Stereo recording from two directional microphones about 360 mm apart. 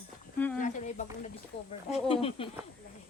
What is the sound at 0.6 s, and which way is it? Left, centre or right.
Speech, centre.